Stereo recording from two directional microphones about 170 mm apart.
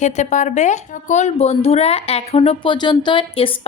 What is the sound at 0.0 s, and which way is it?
A woman's voice, 45° left (ahead or behind).